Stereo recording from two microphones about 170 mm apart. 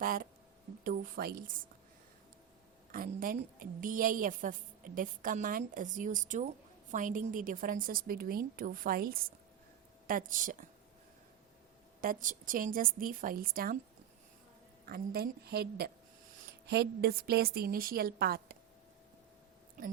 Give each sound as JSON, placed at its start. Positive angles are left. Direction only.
{"t": 0.0, "sound": "a sound", "side_deg": -55}
{"t": 0.9, "sound": "a woman's voice", "side_deg": -60}
{"t": 2.9, "sound": "a woman's voice", "side_deg": -55}
{"t": 11.9, "sound": "a woman's voice", "side_deg": -55}
{"t": 14.8, "sound": "a woman's voice", "side_deg": -65}